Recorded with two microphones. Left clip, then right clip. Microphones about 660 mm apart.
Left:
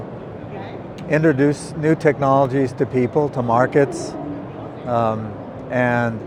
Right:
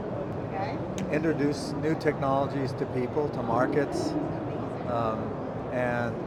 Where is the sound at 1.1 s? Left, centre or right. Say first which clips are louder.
Left 11 dB; left.